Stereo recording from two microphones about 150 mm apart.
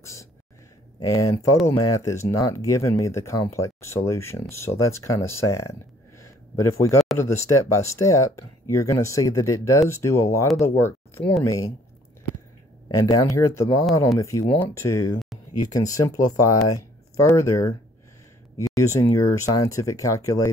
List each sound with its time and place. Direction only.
0.0 s a sound: 20° left (ahead or behind)
0.9 s speech: 25° left (ahead or behind)
12.8 s speech: 25° left (ahead or behind)